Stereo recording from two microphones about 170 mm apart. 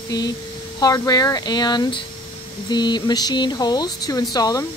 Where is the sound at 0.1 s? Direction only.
25° left (ahead or behind).